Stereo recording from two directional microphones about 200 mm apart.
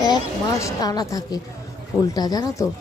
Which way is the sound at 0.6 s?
20° left (ahead or behind).